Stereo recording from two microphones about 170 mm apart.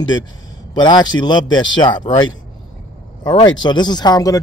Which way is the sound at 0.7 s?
25° left (ahead or behind).